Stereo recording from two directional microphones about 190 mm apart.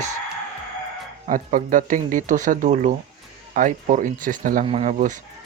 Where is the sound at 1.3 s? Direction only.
45° right (ahead or behind).